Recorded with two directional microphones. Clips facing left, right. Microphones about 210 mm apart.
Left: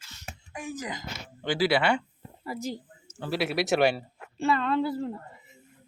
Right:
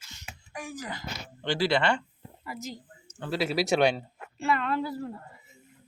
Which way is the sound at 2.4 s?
30° left (ahead or behind).